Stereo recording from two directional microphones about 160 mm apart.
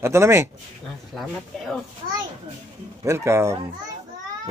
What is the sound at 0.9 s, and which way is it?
Speech, centre (ahead or behind).